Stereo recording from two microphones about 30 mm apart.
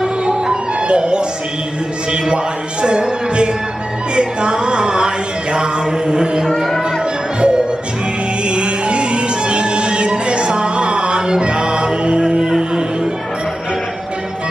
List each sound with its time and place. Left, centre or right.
0.2 s music: right
2.2 s music: right
4.1 s a sound: right
7.3 s music: right